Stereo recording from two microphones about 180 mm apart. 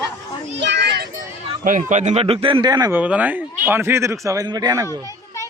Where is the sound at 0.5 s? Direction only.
75° right (ahead or behind).